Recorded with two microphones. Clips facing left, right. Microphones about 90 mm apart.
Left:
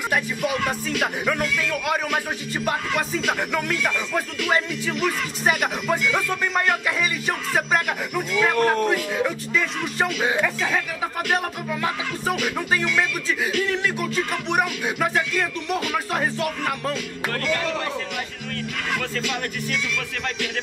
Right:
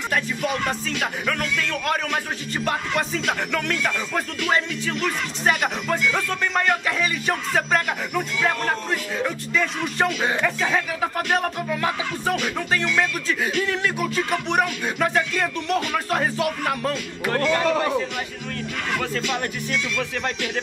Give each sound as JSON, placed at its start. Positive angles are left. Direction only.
{"t": 0.1, "sound": "music", "side_deg": 5}
{"t": 2.6, "sound": "speech", "side_deg": 5}
{"t": 17.3, "sound": "speech", "side_deg": -35}
{"t": 18.9, "sound": "speech", "side_deg": 0}